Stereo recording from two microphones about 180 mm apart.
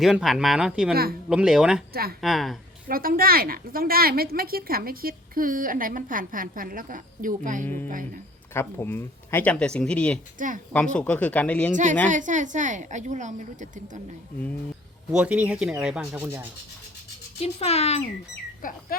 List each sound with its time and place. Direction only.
0.0 s speech: centre (ahead or behind)
1.9 s speech: 60° right (ahead or behind)
2.2 s speech: centre (ahead or behind)
2.8 s a woman's voice: 55° right (ahead or behind)
8.5 s speech: 15° left (ahead or behind)
10.3 s a woman's voice: 45° right (ahead or behind)
10.7 s speech: 5° left (ahead or behind)
11.7 s a woman's voice: 45° right (ahead or behind)
15.1 s speech: 5° right (ahead or behind)
17.4 s speech: 35° left (ahead or behind)
18.6 s speech: 50° left (ahead or behind)